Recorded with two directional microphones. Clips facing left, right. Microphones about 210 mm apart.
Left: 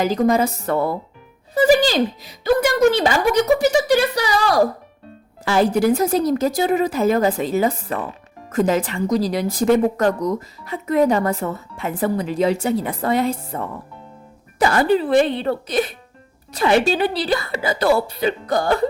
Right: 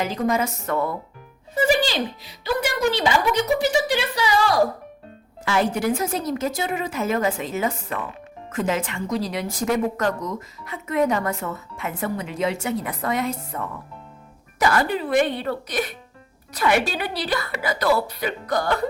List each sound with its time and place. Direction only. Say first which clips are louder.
0.0 s a woman's voice: left 6 dB; 35° left (ahead or behind)